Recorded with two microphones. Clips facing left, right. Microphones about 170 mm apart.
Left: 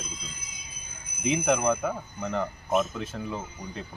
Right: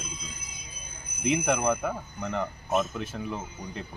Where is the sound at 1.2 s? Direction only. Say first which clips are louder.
Left 1 dB; 5° right (ahead or behind).